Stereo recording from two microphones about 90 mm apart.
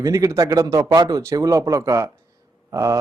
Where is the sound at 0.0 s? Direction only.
35° right (ahead or behind).